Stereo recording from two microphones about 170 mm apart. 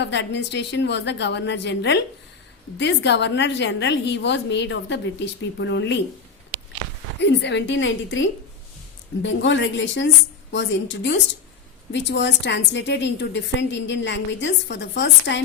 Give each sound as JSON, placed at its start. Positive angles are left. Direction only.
{"t": 0.0, "sound": "a woman's voice", "side_deg": 90}
{"t": 7.2, "sound": "a woman's voice", "side_deg": 90}